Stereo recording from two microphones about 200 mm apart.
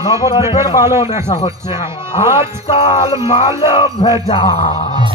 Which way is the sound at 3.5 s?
15° right (ahead or behind).